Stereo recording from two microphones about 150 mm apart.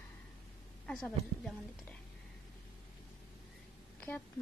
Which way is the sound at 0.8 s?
5° left (ahead or behind).